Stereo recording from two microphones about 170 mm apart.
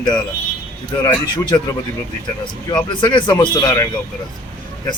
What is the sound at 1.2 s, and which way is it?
Speech, 25° left (ahead or behind).